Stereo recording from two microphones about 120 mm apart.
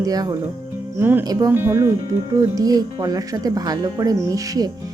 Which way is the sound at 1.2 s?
30° right (ahead or behind).